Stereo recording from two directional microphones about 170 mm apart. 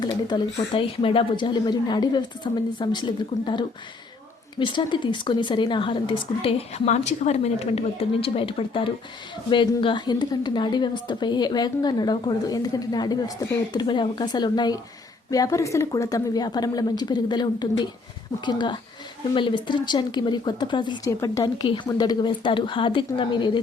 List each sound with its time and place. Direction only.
0.0 s a woman's voice: 25° left (ahead or behind)